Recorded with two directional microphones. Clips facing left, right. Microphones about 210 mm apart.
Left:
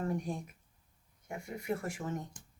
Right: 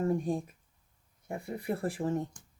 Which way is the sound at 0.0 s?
30° right (ahead or behind).